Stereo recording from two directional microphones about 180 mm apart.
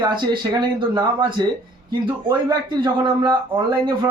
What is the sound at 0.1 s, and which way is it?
A man's voice, 25° right (ahead or behind).